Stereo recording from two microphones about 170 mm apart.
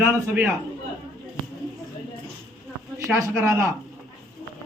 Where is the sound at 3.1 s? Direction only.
15° right (ahead or behind).